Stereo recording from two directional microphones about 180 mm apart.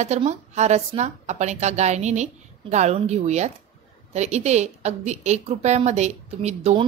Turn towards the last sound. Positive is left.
turn(degrees=-35)  # may be behind; listen again after turning